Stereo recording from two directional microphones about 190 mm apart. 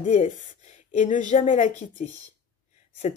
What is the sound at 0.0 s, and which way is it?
A woman's voice, 40° left (ahead or behind).